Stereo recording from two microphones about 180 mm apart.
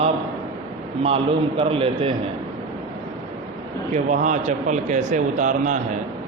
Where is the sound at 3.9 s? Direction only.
40° right (ahead or behind).